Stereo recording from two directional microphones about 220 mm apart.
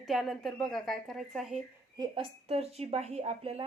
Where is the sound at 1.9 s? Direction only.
20° right (ahead or behind).